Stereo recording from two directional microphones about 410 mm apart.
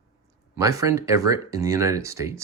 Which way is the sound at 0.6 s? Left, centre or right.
Centre.